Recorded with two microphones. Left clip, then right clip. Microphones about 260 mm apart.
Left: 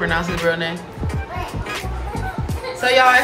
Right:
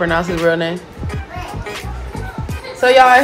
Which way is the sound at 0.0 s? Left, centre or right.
Centre.